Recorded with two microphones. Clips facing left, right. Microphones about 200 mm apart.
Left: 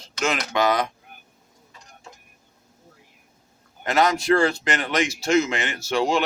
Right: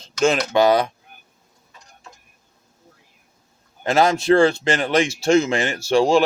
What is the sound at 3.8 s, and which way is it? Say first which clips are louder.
Speech: right 3 dB; 30° right (ahead or behind).